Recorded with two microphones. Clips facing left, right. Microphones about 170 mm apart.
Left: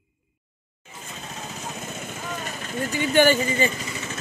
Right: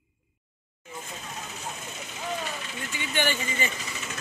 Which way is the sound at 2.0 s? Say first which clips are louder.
Right 3 dB; 50° left (ahead or behind).